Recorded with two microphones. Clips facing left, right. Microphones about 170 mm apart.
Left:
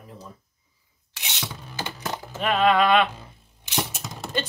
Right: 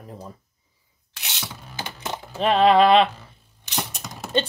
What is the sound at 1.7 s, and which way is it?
Typing, 25° right (ahead or behind).